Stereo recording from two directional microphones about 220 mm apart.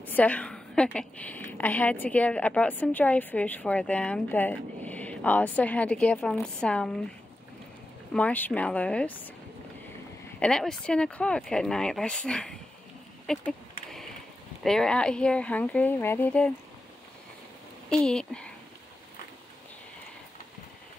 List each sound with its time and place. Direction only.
0.0 s a woman's voice: 10° left (ahead or behind)
8.1 s a woman's voice: 5° left (ahead or behind)
10.4 s speech: centre (ahead or behind)
13.3 s a sound: centre (ahead or behind)
14.6 s speech: centre (ahead or behind)
18.0 s speech: 5° left (ahead or behind)